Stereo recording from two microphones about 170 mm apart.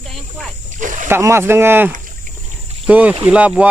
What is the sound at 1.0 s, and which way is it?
Speech, 15° right (ahead or behind).